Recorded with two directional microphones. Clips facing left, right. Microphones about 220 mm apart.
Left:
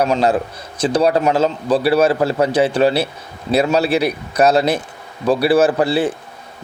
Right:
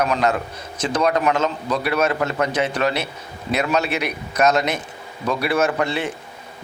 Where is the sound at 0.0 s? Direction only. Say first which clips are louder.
Left 4 dB; 30° left (ahead or behind).